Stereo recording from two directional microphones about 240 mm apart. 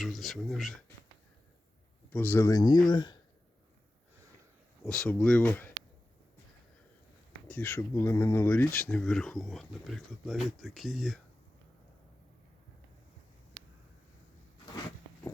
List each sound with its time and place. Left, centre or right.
0.0 s speech: centre
2.0 s speech: centre
4.9 s speech: centre
7.4 s speech: centre